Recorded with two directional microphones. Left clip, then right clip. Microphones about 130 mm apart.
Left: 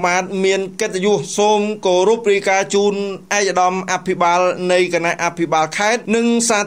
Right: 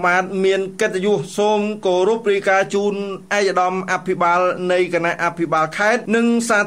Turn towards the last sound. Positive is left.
turn(degrees=25)  # may be behind; listen again after turning